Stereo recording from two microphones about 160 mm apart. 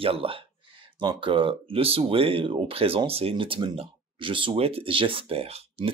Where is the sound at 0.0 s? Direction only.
35° right (ahead or behind).